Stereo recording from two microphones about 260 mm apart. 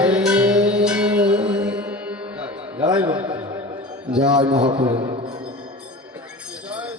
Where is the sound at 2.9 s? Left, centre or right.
Centre.